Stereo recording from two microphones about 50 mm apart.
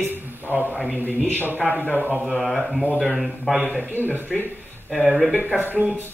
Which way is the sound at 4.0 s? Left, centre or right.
Left.